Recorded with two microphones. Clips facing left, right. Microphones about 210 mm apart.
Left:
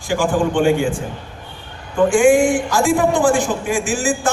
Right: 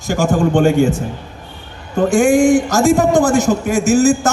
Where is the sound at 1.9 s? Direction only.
40° right (ahead or behind).